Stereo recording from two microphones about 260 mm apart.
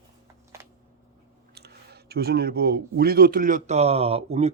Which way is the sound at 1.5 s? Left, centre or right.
Right.